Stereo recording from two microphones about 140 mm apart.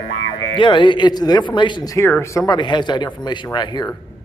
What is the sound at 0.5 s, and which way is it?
Speech, 35° left (ahead or behind).